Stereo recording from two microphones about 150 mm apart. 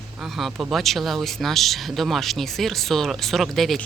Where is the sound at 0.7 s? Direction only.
Centre (ahead or behind).